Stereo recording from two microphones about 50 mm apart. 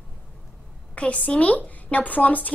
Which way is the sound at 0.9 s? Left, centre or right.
Left.